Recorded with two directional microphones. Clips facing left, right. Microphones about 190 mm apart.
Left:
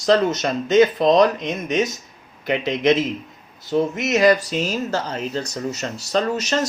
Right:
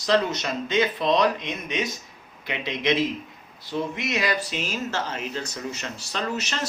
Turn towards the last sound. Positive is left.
turn(degrees=40)  # may be behind; listen again after turning